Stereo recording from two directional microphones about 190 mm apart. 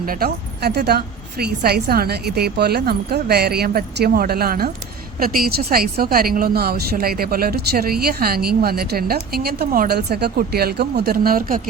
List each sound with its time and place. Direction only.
0.0 s a woman's voice: 50° right (ahead or behind)